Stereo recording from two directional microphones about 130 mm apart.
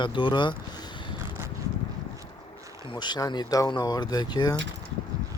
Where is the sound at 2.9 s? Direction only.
35° left (ahead or behind).